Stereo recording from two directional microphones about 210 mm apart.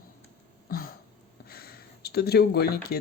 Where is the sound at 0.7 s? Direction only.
45° left (ahead or behind).